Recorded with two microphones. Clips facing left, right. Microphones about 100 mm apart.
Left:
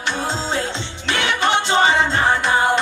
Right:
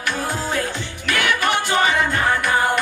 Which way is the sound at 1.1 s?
25° left (ahead or behind).